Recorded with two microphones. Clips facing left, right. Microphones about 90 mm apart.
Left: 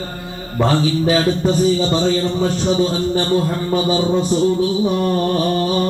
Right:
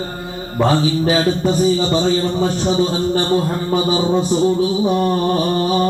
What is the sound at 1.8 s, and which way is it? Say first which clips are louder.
Mantra: even; 20° right (ahead or behind).